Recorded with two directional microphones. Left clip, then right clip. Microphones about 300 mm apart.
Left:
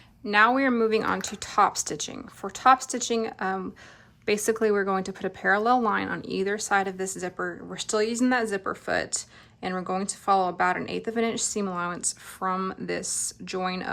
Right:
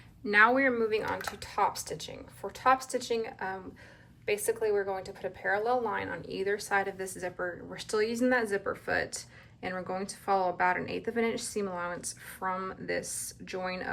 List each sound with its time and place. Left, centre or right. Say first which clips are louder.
0.3 s speech: left 3 dB; centre